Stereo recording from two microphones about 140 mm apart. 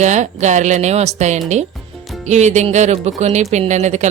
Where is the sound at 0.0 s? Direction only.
60° right (ahead or behind).